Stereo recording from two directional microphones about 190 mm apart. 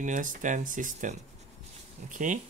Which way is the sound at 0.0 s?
45° right (ahead or behind).